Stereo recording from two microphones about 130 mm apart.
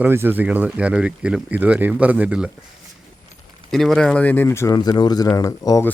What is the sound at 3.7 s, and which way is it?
Speech, centre (ahead or behind).